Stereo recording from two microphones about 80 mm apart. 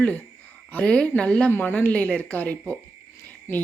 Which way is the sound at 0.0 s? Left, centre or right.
Centre.